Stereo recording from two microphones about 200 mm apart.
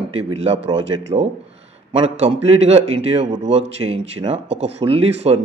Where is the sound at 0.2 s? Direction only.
30° right (ahead or behind).